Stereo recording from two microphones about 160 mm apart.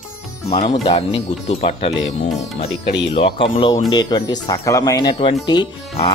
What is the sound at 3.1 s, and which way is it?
Speech, 30° left (ahead or behind).